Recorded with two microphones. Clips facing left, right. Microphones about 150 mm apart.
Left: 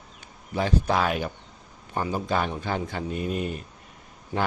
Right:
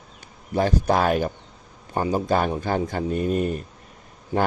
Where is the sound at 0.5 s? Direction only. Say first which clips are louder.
Right 4 dB; 45° right (ahead or behind).